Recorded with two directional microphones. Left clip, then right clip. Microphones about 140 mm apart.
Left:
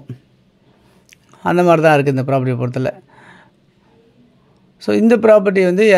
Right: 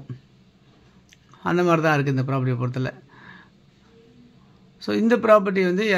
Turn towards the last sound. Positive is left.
turn(degrees=45)  # may be behind; listen again after turning